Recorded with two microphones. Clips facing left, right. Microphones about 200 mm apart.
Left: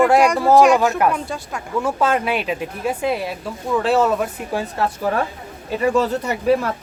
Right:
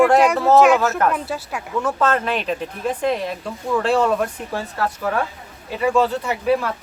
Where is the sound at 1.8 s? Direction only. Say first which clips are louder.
Left 1 dB; 10° left (ahead or behind).